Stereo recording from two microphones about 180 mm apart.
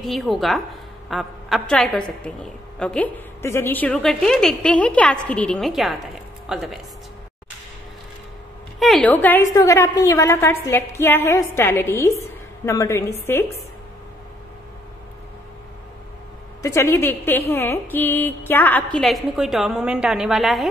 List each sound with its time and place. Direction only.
0.0 s a woman's voice: centre (ahead or behind)
8.7 s a woman's voice: centre (ahead or behind)
16.6 s a woman's voice: 15° left (ahead or behind); by 20.6 s centre (ahead or behind)